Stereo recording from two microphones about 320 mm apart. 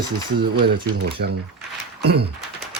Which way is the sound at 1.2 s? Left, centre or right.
Right.